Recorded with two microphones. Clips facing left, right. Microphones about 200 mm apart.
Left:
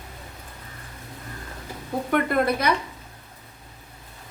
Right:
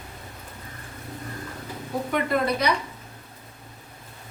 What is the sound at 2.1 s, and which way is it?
Speech, 55° left (ahead or behind).